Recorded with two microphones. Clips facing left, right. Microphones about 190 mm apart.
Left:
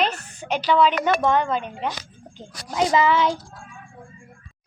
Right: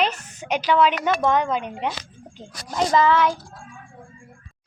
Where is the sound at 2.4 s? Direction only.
5° left (ahead or behind).